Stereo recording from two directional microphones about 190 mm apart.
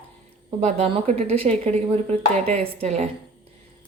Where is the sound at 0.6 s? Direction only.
35° right (ahead or behind).